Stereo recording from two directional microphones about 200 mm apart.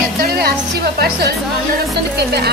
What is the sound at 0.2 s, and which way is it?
Speech, 50° right (ahead or behind).